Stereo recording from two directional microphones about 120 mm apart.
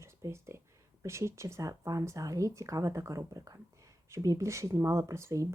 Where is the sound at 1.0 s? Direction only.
25° right (ahead or behind).